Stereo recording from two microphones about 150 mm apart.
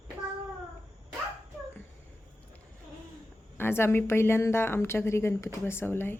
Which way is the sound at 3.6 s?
15° left (ahead or behind).